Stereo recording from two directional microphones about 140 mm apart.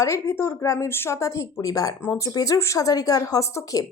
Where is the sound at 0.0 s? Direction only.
20° left (ahead or behind).